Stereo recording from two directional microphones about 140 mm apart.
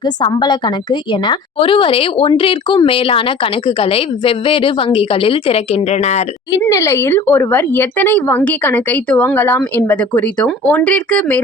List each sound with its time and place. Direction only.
0.0 s a woman's voice: 30° left (ahead or behind); by 6.2 s 50° left (ahead or behind)
6.7 s speech: 20° left (ahead or behind)